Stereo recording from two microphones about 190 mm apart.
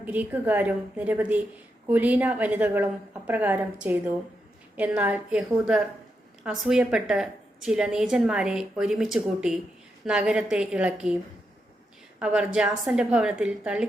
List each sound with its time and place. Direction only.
0.0 s a woman's voice: 10° right (ahead or behind)
12.2 s a woman's voice: 5° right (ahead or behind)